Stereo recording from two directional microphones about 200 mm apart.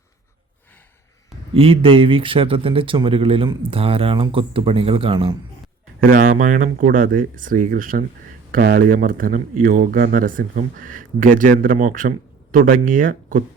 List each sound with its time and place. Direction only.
1.5 s speech: 25° right (ahead or behind)
6.0 s speech: 45° right (ahead or behind)